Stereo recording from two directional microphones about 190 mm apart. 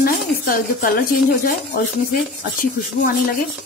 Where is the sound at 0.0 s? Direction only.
50° left (ahead or behind).